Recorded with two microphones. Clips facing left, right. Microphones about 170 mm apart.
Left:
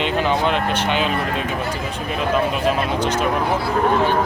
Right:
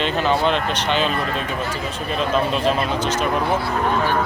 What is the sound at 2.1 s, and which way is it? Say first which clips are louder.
Speech: even; 10° left (ahead or behind).